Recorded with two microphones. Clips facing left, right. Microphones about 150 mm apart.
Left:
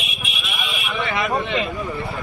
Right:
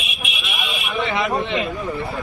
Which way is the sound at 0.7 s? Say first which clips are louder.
Right 2 dB; 20° right (ahead or behind).